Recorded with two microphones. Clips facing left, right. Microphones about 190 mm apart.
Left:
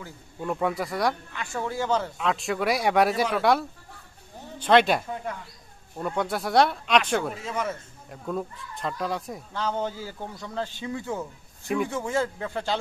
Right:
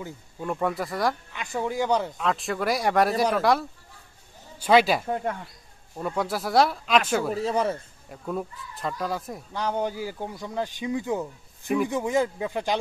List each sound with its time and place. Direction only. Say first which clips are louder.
0.4 s speech: even; centre (ahead or behind)
1.3 s speech: right 2 dB; 15° right (ahead or behind)
2.1 s speech: even; centre (ahead or behind)
5.0 s speech: right 5 dB; 55° right (ahead or behind)
6.0 s speech: even; centre (ahead or behind)
7.3 s speech: right 6 dB; 35° right (ahead or behind)
8.1 s speech: even; 5° right (ahead or behind)
9.5 s speech: right 2 dB; 15° right (ahead or behind)